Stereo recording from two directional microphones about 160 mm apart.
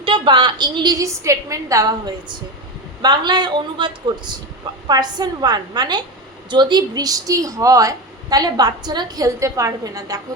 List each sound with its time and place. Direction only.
0.0 s speech: 30° right (ahead or behind)